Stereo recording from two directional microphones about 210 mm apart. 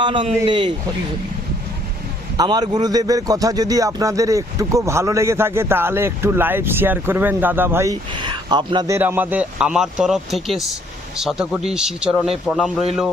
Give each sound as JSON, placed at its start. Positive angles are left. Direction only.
{"t": 0.0, "sound": "a man's voice", "side_deg": -25}
{"t": 2.4, "sound": "speech", "side_deg": -20}
{"t": 9.0, "sound": "speech", "side_deg": -10}